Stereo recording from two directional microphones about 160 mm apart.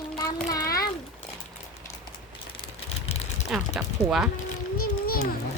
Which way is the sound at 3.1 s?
40° left (ahead or behind).